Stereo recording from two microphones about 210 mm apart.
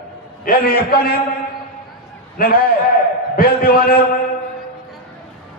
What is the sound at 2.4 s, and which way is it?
A man's voice, 45° left (ahead or behind).